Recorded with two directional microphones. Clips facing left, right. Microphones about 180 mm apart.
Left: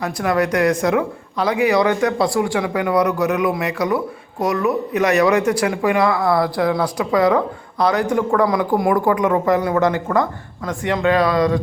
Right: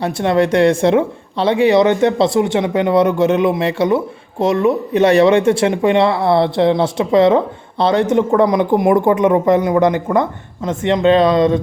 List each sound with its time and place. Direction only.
0.0 s speech: 25° right (ahead or behind)